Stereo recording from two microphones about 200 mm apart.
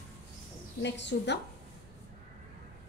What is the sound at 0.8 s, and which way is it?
Speech, 60° left (ahead or behind).